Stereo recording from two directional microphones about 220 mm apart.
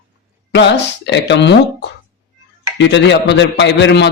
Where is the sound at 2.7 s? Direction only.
55° left (ahead or behind).